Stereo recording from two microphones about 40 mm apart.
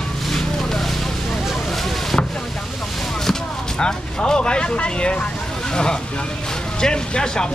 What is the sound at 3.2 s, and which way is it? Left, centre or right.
Speech, centre.